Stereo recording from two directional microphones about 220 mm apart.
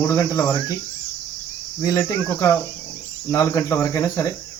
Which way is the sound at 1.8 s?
15° left (ahead or behind).